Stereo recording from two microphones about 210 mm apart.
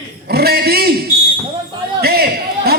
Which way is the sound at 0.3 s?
50° right (ahead or behind).